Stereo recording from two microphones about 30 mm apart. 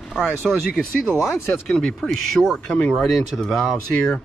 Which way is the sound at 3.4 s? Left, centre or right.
Centre.